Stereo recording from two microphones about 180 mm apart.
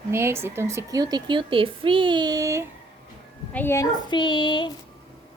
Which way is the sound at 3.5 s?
10° left (ahead or behind).